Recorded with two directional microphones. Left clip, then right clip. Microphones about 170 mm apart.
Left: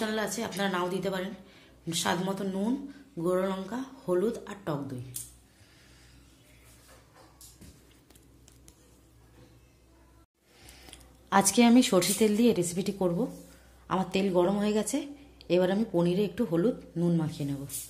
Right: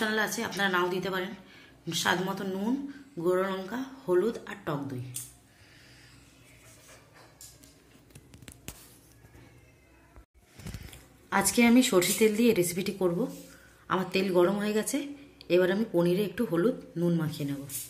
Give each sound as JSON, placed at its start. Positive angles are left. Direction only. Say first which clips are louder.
{"t": 0.0, "sound": "a woman's voice", "louder": "right 3 dB", "side_deg": 25}
{"t": 10.9, "sound": "a woman's voice", "louder": "left 3 dB", "side_deg": 25}